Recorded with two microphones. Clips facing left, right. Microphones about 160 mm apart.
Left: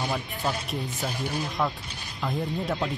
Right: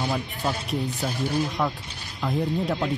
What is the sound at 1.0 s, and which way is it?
Speech, centre (ahead or behind).